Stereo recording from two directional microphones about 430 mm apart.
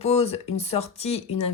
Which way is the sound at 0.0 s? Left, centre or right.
Centre.